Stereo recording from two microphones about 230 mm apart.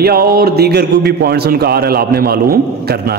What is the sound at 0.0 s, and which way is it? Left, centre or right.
A man's voice, right.